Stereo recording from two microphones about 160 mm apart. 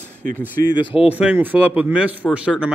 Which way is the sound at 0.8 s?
35° left (ahead or behind).